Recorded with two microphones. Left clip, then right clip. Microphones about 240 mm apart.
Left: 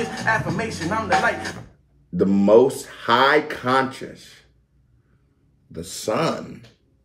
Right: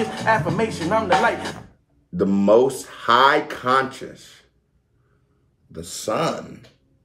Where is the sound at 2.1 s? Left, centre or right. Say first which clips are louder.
Left 1 dB; centre.